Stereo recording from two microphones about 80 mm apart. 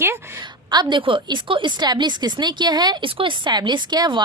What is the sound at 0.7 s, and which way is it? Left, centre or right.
A woman's voice, right.